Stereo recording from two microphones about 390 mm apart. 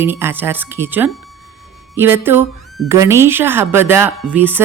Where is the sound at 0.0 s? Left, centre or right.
Centre.